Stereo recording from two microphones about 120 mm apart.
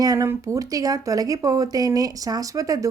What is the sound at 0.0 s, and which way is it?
A woman's voice, 30° right (ahead or behind).